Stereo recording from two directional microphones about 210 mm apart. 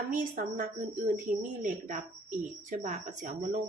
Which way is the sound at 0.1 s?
40° right (ahead or behind).